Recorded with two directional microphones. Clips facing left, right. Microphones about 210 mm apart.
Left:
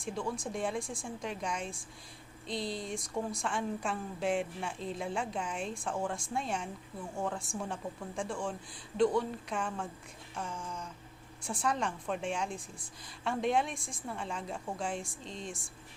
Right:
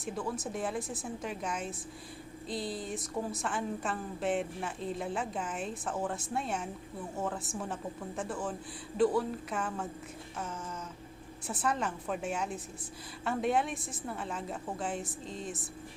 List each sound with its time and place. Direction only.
0.0 s a woman's voice: 5° right (ahead or behind)